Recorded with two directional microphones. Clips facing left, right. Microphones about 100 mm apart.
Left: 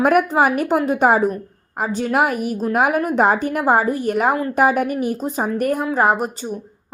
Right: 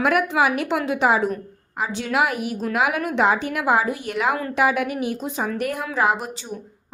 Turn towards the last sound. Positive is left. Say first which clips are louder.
# left 4 dB
turn(degrees=45)  # may be behind; listen again after turning